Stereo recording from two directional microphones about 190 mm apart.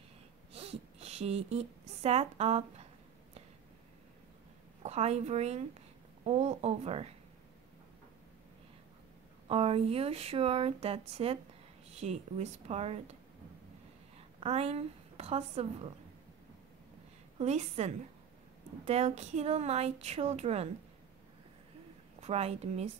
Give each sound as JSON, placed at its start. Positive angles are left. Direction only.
{"t": 0.5, "sound": "a woman's voice", "side_deg": -30}
{"t": 4.8, "sound": "a woman's voice", "side_deg": -35}
{"t": 9.5, "sound": "a woman's voice", "side_deg": -30}
{"t": 14.4, "sound": "a woman's voice", "side_deg": -30}
{"t": 17.4, "sound": "a woman's voice", "side_deg": -35}
{"t": 22.2, "sound": "a woman's voice", "side_deg": -35}